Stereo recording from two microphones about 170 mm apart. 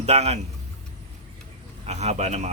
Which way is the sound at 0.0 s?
40° right (ahead or behind).